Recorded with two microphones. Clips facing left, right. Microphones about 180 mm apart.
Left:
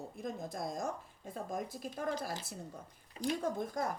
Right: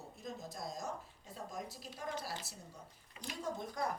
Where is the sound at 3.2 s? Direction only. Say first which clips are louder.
Left 12 dB; 35° left (ahead or behind).